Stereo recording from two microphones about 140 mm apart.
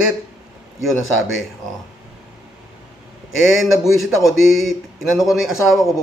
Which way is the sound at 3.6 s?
Centre (ahead or behind).